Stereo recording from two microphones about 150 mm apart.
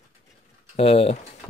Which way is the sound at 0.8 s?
40° left (ahead or behind).